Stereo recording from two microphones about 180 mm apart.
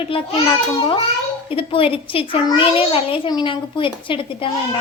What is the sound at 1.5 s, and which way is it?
A child's voice, 30° left (ahead or behind).